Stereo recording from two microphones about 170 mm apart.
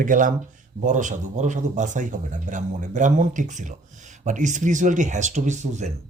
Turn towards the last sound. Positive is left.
turn(degrees=-45)  # may be behind; listen again after turning